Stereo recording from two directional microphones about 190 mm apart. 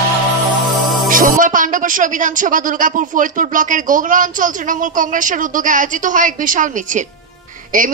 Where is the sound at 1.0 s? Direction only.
45° right (ahead or behind).